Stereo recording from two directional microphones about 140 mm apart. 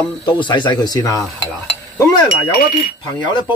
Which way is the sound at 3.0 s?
35° left (ahead or behind).